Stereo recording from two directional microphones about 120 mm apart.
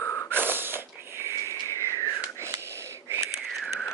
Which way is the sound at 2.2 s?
20° right (ahead or behind).